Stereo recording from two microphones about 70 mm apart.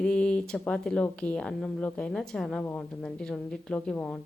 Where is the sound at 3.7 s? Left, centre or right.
Centre.